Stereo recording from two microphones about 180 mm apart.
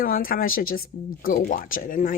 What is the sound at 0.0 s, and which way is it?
Speech, 50° left (ahead or behind).